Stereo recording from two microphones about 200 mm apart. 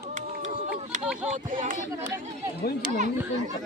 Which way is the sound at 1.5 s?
40° right (ahead or behind).